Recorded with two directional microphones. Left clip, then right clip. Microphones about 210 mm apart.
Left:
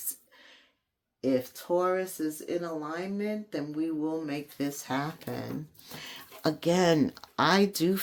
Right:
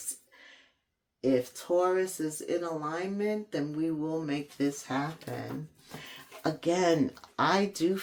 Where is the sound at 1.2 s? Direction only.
25° left (ahead or behind).